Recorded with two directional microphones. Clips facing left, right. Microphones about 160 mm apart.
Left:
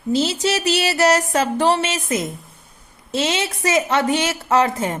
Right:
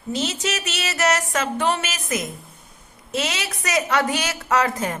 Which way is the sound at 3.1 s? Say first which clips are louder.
Left 5 dB; 30° left (ahead or behind).